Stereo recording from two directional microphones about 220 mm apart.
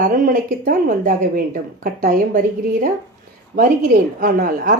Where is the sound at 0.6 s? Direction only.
40° right (ahead or behind).